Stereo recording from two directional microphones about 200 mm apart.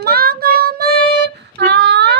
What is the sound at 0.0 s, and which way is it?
Child singing, 50° right (ahead or behind).